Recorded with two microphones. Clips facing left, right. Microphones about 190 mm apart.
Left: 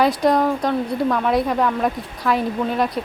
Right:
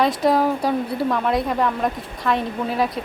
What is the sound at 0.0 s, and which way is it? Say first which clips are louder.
A woman's voice: left 1 dB; centre (ahead or behind).